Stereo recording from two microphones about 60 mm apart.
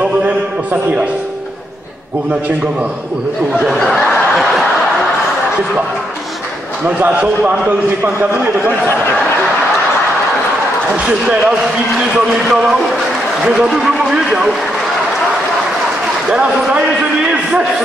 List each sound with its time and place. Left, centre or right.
3.6 s snicker: centre
7.1 s a man's voice: centre
11.0 s a man's voice: centre
14.1 s a man's voice: centre
16.3 s a man's voice: centre
17.3 s a sound: centre